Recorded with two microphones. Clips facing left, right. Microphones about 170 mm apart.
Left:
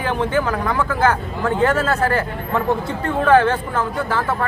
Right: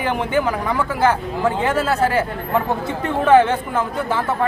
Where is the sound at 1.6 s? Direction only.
10° right (ahead or behind).